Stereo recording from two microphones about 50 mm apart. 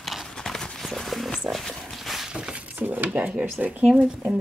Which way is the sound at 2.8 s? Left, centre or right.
Right.